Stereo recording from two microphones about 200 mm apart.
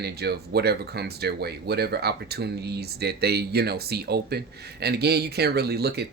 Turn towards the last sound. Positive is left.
turn(degrees=-55)  # may be behind; listen again after turning